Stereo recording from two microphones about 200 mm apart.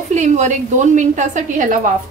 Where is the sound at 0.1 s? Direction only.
35° right (ahead or behind).